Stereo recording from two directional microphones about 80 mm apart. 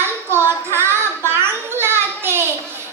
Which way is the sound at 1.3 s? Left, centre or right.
Right.